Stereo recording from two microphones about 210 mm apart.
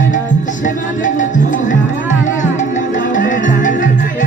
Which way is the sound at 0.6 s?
35° left (ahead or behind).